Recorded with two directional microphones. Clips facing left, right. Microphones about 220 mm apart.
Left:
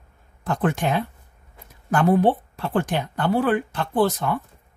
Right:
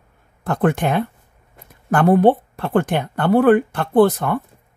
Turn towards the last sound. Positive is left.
turn(degrees=-60)  # may be behind; listen again after turning